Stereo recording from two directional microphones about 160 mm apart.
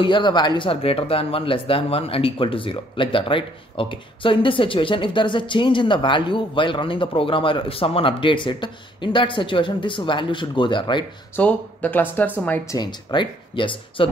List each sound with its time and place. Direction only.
0.0 s speech: 30° left (ahead or behind)
11.3 s speech: 10° left (ahead or behind)
12.7 s speech: 30° left (ahead or behind)